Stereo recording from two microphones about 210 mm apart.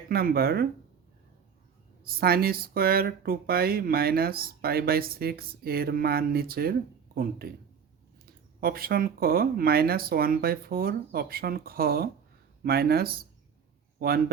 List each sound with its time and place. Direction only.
0.1 s speech: 45° right (ahead or behind)
2.0 s speech: 45° right (ahead or behind)
8.6 s speech: 45° right (ahead or behind)